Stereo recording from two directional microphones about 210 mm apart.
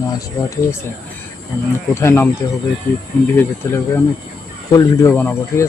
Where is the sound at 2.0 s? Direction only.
10° left (ahead or behind).